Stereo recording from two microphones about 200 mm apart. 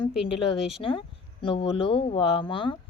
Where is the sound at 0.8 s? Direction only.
25° left (ahead or behind).